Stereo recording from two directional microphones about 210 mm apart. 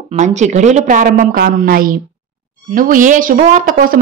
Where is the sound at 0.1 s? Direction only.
35° right (ahead or behind).